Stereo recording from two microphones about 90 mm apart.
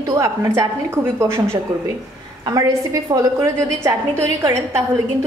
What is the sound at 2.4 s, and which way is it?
A woman's voice, 45° right (ahead or behind).